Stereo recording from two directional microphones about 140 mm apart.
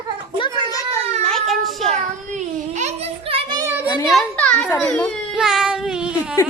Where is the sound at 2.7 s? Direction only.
50° right (ahead or behind).